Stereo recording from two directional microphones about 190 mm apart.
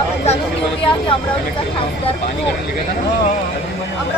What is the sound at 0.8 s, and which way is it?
Speech, 30° left (ahead or behind).